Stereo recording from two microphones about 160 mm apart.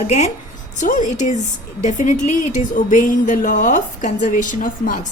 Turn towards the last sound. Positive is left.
turn(degrees=55)  # may be behind; listen again after turning